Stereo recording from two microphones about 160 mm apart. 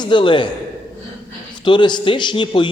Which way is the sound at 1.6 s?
30° left (ahead or behind).